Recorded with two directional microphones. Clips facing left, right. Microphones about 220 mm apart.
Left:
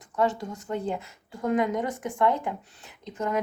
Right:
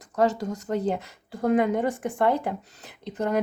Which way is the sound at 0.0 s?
40° right (ahead or behind).